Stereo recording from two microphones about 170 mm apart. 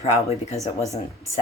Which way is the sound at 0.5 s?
20° left (ahead or behind).